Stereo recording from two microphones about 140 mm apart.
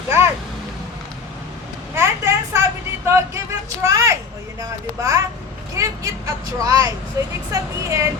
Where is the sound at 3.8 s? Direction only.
20° right (ahead or behind).